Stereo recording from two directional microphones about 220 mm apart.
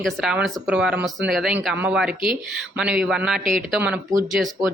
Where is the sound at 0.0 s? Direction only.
Centre (ahead or behind).